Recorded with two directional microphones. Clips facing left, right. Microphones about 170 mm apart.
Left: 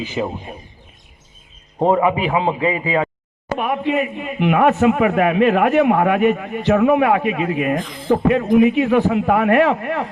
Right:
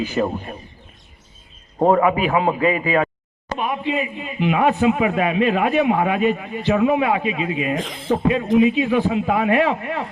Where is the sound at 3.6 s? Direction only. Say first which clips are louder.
Left 3 dB; 65° left (ahead or behind).